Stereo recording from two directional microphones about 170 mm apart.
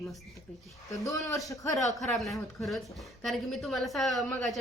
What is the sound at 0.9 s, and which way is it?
Speech, 20° left (ahead or behind).